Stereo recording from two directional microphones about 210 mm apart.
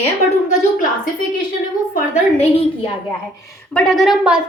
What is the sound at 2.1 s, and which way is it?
Speech, 30° left (ahead or behind).